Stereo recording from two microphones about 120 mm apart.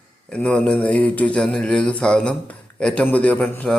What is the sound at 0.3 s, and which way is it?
Speech, 10° left (ahead or behind).